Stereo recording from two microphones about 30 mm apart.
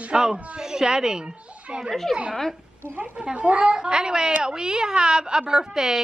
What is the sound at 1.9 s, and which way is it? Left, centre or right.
Speech, centre.